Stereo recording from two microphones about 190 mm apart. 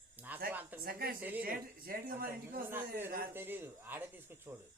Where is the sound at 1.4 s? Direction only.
50° right (ahead or behind).